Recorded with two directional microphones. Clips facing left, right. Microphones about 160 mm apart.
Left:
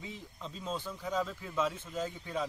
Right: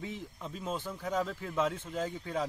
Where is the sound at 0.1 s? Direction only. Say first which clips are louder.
Right 3 dB; 15° right (ahead or behind).